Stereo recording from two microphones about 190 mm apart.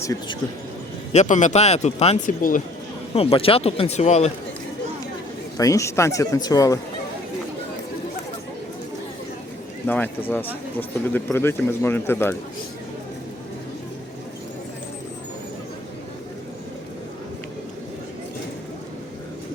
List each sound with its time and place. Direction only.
0.0 s speech: 15° left (ahead or behind)
1.1 s speech: 40° left (ahead or behind)
5.5 s speech: 15° left (ahead or behind)
9.8 s speech: 10° left (ahead or behind)